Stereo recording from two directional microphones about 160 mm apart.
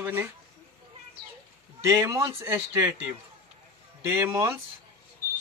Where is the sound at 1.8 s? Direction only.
20° right (ahead or behind).